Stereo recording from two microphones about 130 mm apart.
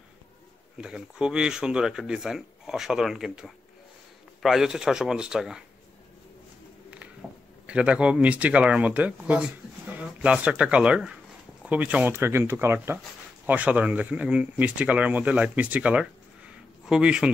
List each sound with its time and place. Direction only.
0.7 s speech: 5° right (ahead or behind)
7.2 s a sound: 5° right (ahead or behind)
7.6 s speech: 10° right (ahead or behind)